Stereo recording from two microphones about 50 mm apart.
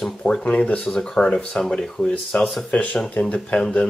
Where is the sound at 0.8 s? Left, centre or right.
Centre.